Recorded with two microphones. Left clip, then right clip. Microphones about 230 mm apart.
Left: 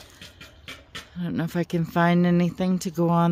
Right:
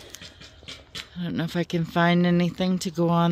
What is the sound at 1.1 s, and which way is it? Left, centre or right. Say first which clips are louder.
Speech: left 1 dB; centre.